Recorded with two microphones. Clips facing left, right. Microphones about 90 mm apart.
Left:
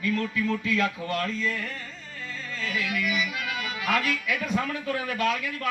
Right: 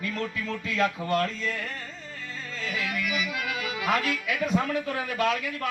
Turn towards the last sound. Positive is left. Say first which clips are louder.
# even
turn(degrees=-25)  # may be behind; listen again after turning